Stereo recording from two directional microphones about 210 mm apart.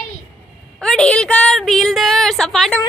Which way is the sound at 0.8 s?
5° left (ahead or behind).